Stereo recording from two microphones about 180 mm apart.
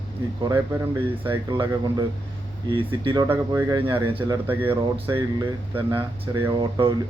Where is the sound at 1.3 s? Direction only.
25° right (ahead or behind).